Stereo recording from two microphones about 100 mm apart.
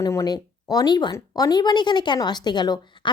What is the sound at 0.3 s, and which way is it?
A woman's voice, 40° left (ahead or behind).